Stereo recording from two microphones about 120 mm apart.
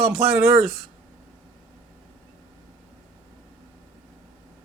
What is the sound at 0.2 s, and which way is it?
Speech, 20° right (ahead or behind).